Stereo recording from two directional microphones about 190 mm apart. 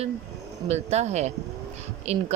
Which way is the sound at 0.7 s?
35° right (ahead or behind).